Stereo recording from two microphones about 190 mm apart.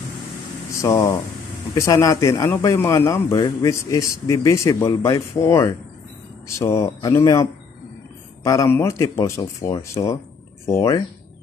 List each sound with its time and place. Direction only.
0.7 s a sound: 15° left (ahead or behind)
1.8 s a man's voice: 15° left (ahead or behind)
8.5 s a man's voice: 15° left (ahead or behind)